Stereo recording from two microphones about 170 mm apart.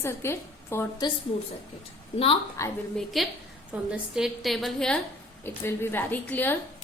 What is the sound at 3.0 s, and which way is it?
A woman's voice, centre (ahead or behind).